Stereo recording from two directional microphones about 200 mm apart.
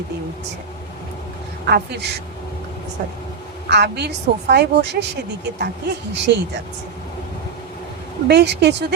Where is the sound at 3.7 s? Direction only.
55° right (ahead or behind).